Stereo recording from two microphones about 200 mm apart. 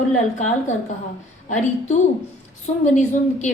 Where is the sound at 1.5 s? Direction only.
35° left (ahead or behind).